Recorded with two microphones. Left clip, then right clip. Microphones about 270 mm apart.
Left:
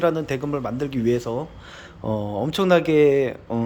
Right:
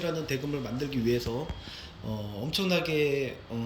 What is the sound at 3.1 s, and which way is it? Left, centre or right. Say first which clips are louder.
Speech: left 11 dB; left.